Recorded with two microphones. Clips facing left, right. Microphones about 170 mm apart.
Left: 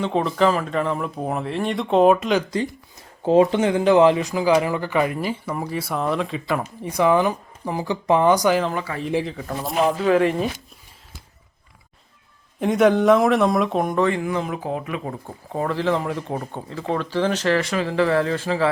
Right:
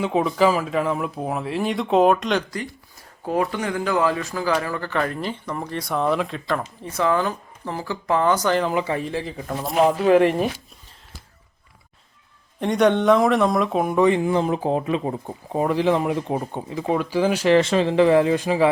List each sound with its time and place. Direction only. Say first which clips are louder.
0.0 s speech: right 1 dB; 5° right (ahead or behind)
3.2 s speech: left 7 dB; 25° left (ahead or behind)
8.7 s speech: right 5 dB; 20° right (ahead or behind)
9.2 s speech: even; centre (ahead or behind)
12.5 s speech: left 1 dB; 5° left (ahead or behind)
17.6 s speech: right 4 dB; 25° right (ahead or behind)